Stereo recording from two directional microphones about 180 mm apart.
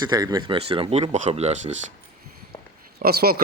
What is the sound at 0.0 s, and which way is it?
Speech, 20° right (ahead or behind).